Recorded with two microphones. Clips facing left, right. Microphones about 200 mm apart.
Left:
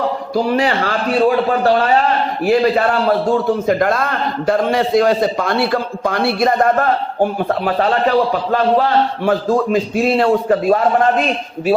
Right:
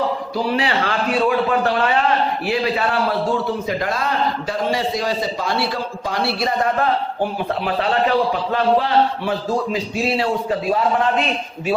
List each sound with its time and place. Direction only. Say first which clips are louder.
0.3 s a man's voice: left 5 dB; 45° left (ahead or behind)